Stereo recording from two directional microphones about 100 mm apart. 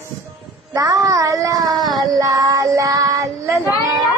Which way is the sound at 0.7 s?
35° right (ahead or behind).